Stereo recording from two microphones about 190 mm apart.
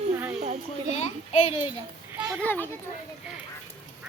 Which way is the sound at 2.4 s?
10° left (ahead or behind).